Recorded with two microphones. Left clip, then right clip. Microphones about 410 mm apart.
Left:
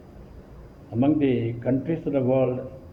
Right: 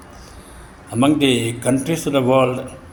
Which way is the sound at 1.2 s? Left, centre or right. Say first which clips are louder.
Right 6 dB; left.